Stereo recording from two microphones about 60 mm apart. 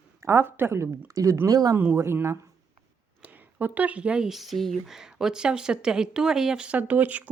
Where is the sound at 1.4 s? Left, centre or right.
Right.